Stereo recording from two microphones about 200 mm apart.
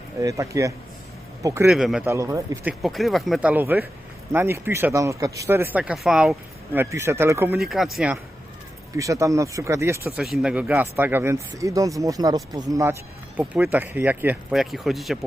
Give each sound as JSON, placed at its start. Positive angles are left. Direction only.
{"t": 0.2, "sound": "speech", "side_deg": -15}
{"t": 1.6, "sound": "speech", "side_deg": 0}
{"t": 2.0, "sound": "speech", "side_deg": -15}
{"t": 2.8, "sound": "speech", "side_deg": 0}
{"t": 6.7, "sound": "speech", "side_deg": -10}
{"t": 7.6, "sound": "speech", "side_deg": 0}
{"t": 9.0, "sound": "speech", "side_deg": -15}